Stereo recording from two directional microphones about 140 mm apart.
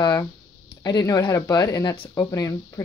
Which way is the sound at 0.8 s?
30° left (ahead or behind).